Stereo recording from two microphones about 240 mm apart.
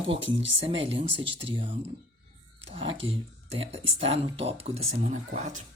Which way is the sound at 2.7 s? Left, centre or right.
Right.